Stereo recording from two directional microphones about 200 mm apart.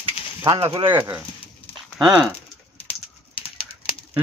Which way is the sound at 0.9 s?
10° right (ahead or behind).